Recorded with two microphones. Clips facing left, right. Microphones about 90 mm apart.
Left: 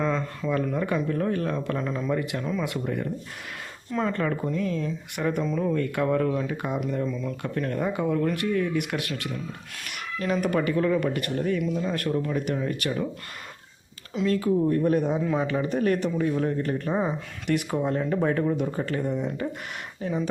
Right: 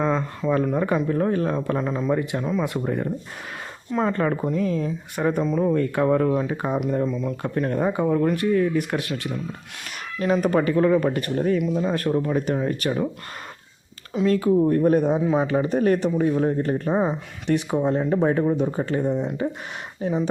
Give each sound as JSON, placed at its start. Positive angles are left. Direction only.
{"t": 0.0, "sound": "speech", "side_deg": -35}
{"t": 2.8, "sound": "speech", "side_deg": -35}
{"t": 14.3, "sound": "speech", "side_deg": -35}